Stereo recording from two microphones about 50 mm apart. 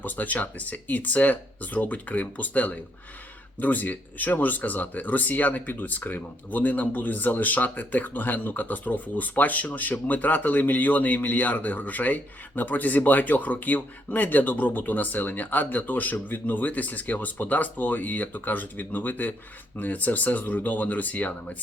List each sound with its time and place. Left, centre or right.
0.0 s speech: left